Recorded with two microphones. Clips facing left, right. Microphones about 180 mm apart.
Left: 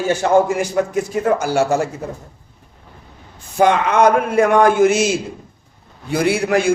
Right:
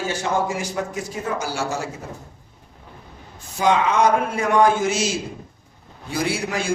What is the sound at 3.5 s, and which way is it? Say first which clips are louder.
A man's voice: left 4 dB; 60° left (ahead or behind).